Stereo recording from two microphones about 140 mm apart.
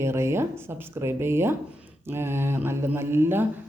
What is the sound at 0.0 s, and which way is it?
Speech, 20° right (ahead or behind).